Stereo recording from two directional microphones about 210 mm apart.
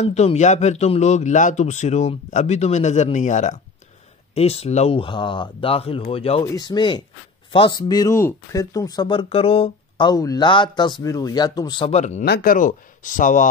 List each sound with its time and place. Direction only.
0.0 s speech: 30° left (ahead or behind)
6.4 s speech: 20° left (ahead or behind); by 13.5 s 40° left (ahead or behind)